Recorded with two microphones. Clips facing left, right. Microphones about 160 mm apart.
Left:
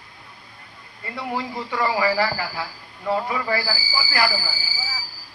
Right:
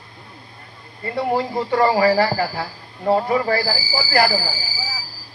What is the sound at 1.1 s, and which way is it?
Speech, 50° right (ahead or behind).